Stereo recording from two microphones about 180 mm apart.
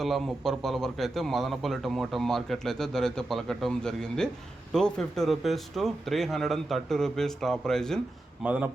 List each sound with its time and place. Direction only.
0.0 s speech: centre (ahead or behind)
8.4 s a man's voice: 10° right (ahead or behind)